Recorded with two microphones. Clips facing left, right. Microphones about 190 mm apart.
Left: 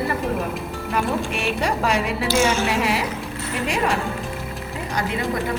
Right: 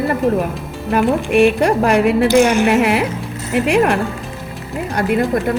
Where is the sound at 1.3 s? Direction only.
55° right (ahead or behind).